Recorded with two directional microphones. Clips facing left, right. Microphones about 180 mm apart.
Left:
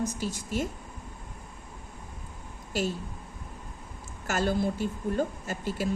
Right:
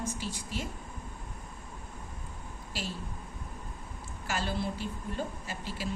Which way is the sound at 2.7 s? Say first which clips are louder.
Left 10 dB; 45° left (ahead or behind).